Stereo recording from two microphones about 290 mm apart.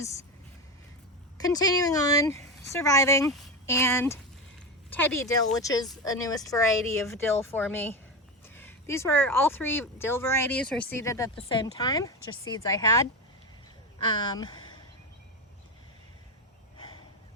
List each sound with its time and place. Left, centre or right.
1.4 s speech: centre
14.1 s speech: centre
16.7 s snort: centre